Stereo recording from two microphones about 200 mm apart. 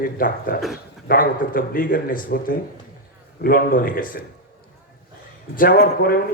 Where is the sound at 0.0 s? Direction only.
45° left (ahead or behind).